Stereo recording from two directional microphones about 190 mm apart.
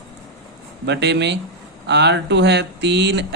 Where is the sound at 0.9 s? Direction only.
65° right (ahead or behind).